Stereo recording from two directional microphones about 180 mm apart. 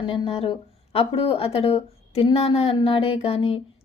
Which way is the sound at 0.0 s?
30° left (ahead or behind).